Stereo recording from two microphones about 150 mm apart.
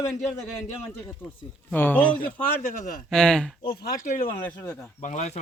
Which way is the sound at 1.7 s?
15° left (ahead or behind).